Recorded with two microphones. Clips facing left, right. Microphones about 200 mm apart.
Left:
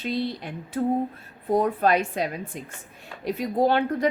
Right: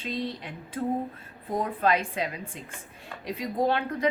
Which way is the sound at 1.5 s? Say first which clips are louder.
Left 5 dB; 40° left (ahead or behind).